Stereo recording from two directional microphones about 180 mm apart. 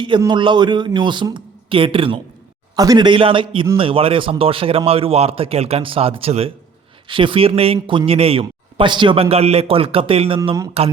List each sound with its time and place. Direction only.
0.2 s a man's voice: 25° right (ahead or behind)